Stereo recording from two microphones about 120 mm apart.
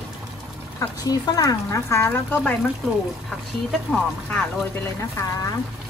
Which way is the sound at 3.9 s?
5° left (ahead or behind).